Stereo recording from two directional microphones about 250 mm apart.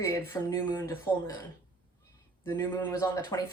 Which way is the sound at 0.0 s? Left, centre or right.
Centre.